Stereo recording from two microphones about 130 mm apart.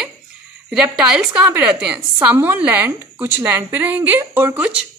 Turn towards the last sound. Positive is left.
turn(degrees=-15)  # may be behind; listen again after turning